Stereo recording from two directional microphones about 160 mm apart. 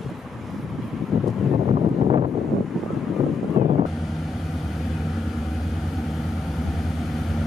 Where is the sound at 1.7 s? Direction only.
35° right (ahead or behind).